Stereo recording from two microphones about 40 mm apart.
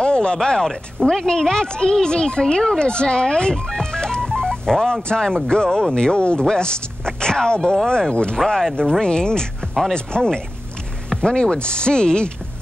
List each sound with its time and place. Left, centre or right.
0.0 s a sound: left
1.0 s speech: centre
3.8 s music: centre
5.0 s speech: centre